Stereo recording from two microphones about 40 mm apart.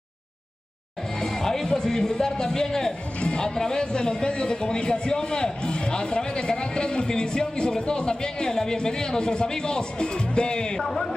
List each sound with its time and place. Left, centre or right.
1.2 s speech: centre
10.8 s speech: centre